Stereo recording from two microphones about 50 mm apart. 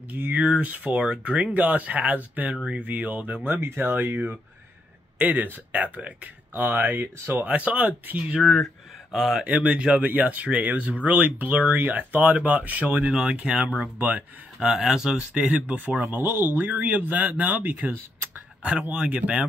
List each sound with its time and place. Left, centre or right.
0.1 s speech: right
3.4 s speech: right
7.4 s speech: right
8.4 s speech: centre
9.5 s speech: right
14.6 s speech: centre
15.5 s speech: right
16.2 s speech: right
18.6 s speech: right